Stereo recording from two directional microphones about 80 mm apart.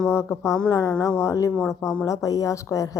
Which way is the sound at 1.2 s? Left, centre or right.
Left.